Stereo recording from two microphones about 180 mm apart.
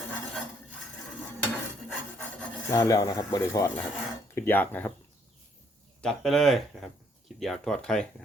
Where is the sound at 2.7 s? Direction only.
20° left (ahead or behind).